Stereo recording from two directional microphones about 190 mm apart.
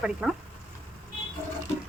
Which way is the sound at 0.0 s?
5° right (ahead or behind).